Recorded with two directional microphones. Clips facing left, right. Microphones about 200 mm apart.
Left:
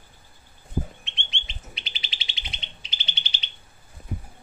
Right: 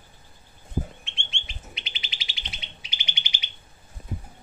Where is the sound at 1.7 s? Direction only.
35° left (ahead or behind).